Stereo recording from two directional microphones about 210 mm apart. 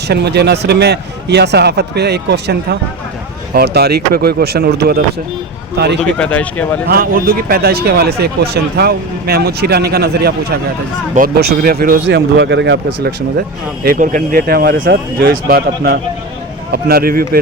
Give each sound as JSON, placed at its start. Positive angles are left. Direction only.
{"t": 0.1, "sound": "a man's voice", "side_deg": -50}
{"t": 6.1, "sound": "speech", "side_deg": 5}
{"t": 6.9, "sound": "a man's voice", "side_deg": -45}